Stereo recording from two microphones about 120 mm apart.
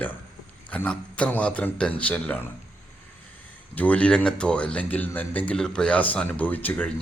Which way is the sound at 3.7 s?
10° left (ahead or behind).